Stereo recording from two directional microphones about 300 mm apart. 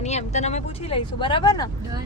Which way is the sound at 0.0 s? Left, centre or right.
Left.